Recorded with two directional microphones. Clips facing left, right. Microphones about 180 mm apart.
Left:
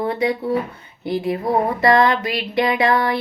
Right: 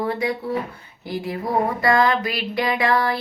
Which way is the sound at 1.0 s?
25° left (ahead or behind).